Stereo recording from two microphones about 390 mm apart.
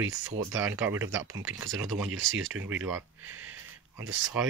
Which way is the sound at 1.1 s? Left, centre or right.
Right.